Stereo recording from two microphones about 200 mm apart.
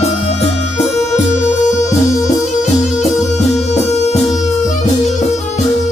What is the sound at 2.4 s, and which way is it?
Music, 35° left (ahead or behind).